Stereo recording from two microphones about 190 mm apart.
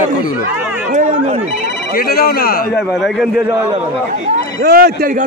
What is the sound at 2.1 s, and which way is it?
Speech, 55° left (ahead or behind).